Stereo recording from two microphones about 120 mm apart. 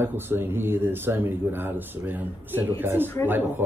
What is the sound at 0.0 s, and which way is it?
Speech, 20° right (ahead or behind).